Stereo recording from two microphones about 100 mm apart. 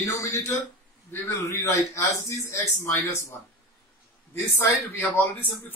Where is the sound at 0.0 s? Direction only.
30° left (ahead or behind).